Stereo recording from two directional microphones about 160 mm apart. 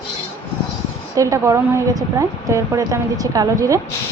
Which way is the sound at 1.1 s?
20° right (ahead or behind).